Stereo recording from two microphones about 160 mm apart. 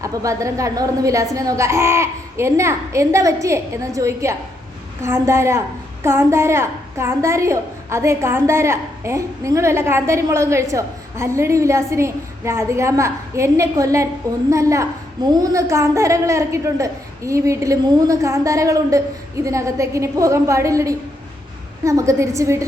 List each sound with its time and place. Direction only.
0.0 s a woman's voice: 20° right (ahead or behind)